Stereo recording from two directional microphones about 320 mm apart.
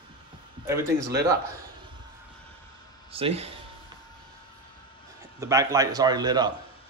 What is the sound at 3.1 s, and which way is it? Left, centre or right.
Speech, centre.